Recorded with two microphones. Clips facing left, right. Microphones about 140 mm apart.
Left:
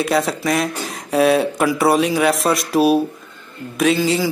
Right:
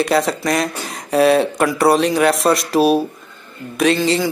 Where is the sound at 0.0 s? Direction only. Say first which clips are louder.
Right 2 dB; centre (ahead or behind).